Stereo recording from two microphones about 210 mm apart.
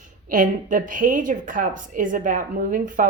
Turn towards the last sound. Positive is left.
turn(degrees=-40)  # may be behind; listen again after turning